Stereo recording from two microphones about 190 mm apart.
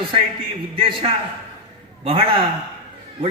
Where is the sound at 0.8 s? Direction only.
25° right (ahead or behind).